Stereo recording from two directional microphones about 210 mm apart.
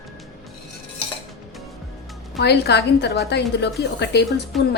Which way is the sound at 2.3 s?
55° left (ahead or behind).